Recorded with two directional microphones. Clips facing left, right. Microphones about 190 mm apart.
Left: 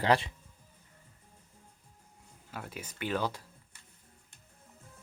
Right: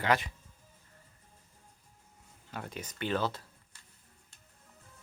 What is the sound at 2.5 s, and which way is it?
Speech, 5° left (ahead or behind).